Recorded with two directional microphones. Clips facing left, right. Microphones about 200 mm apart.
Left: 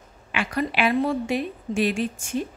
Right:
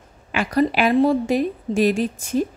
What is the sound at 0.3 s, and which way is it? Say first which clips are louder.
A woman's voice: right 7 dB; 40° right (ahead or behind).